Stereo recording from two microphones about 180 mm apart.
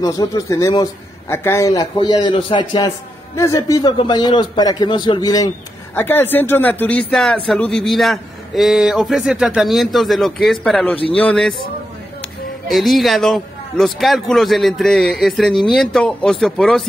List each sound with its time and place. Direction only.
0.0 s a man's voice: 20° left (ahead or behind)
12.6 s speech: centre (ahead or behind)